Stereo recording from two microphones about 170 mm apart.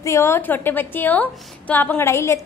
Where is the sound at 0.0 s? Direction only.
15° left (ahead or behind).